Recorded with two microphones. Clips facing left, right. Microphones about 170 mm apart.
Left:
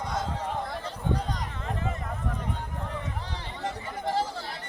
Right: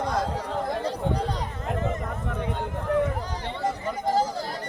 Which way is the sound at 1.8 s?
40° right (ahead or behind).